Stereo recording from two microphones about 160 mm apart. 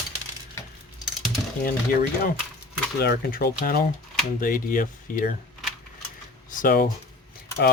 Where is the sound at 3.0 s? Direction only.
75° left (ahead or behind); by 5.3 s 60° left (ahead or behind).